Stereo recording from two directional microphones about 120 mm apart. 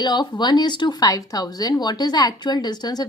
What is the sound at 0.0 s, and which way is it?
A woman's voice, 35° left (ahead or behind).